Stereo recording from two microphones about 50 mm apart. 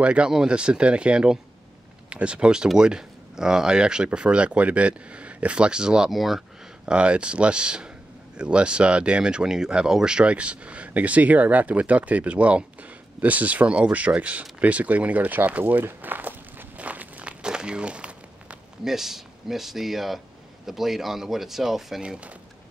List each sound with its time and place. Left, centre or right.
0.0 s speech: right
6.1 s speech: centre
6.9 s speech: right
15.8 s walk: right
18.9 s speech: centre
22.0 s speech: right